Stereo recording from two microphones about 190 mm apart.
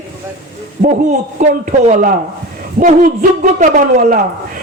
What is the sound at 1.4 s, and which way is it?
A man's voice, 40° right (ahead or behind).